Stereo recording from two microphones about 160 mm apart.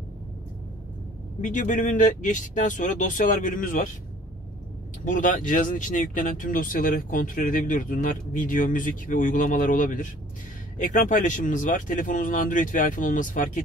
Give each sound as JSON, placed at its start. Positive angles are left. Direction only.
{"t": 1.4, "sound": "speech", "side_deg": 55}
{"t": 5.0, "sound": "speech", "side_deg": 55}